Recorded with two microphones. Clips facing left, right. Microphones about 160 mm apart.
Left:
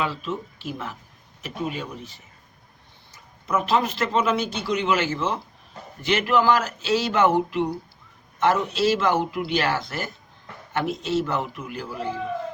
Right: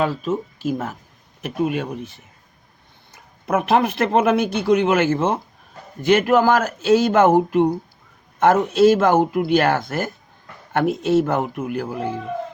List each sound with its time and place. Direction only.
0.0 s speech: 45° right (ahead or behind)
1.4 s speech: 55° right (ahead or behind)